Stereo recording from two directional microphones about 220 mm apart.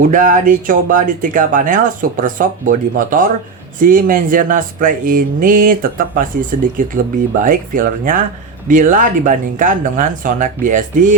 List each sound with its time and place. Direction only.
0.0 s speech: 35° right (ahead or behind)